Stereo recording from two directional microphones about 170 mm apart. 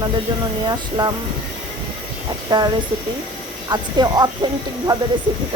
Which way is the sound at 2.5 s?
25° right (ahead or behind).